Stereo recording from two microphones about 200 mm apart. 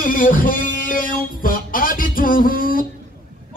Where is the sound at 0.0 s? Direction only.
45° left (ahead or behind).